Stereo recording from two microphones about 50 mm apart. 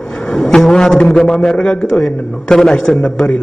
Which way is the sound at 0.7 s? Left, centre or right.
Centre.